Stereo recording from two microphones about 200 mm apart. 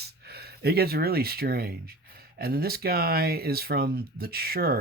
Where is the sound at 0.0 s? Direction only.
50° right (ahead or behind).